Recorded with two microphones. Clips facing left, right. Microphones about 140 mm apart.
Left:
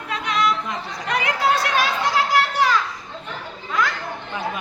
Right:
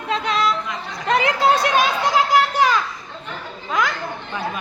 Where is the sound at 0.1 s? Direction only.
30° right (ahead or behind).